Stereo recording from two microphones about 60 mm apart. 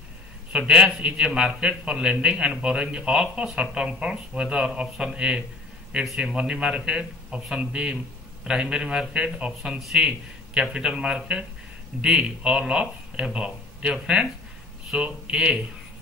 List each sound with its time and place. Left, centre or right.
0.5 s a man's voice: centre
9.6 s a man's voice: centre